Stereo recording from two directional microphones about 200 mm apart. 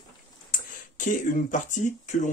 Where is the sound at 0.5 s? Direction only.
40° left (ahead or behind).